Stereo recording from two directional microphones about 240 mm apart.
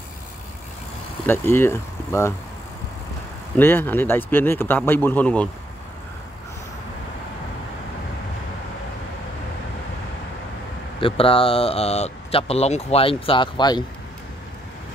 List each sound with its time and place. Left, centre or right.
1.2 s speech: centre
3.5 s speech: centre
11.0 s speech: left